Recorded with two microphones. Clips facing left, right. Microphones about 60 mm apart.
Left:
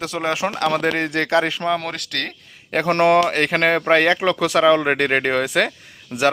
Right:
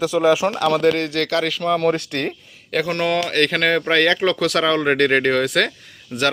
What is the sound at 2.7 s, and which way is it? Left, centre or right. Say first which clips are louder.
Speech: left 4 dB; left.